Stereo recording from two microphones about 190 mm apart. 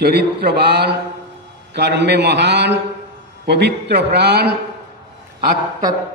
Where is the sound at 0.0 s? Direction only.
55° right (ahead or behind).